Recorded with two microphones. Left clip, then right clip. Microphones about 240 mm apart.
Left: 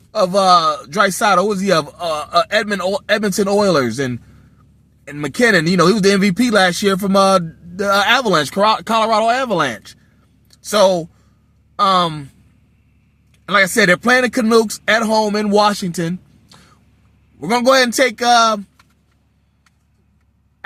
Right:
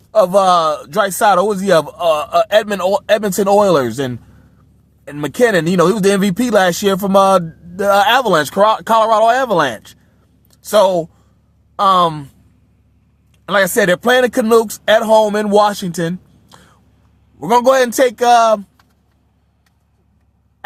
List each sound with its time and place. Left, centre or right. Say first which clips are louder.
0.2 s a man's voice: right 2 dB; right
13.5 s a man's voice: even; right
17.4 s a man's voice: right 2 dB; right